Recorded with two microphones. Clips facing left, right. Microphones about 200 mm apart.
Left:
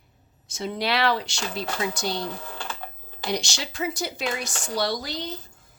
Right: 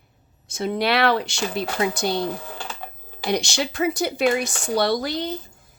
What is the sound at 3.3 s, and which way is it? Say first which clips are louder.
A woman's voice: right 6 dB; 60° right (ahead or behind).